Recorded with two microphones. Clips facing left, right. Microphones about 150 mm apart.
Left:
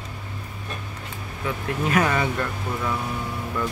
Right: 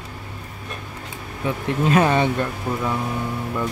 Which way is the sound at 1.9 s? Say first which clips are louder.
Right 4 dB; 25° right (ahead or behind).